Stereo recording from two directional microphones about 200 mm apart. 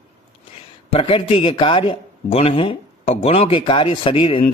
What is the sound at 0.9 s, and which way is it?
A man's voice, 30° left (ahead or behind).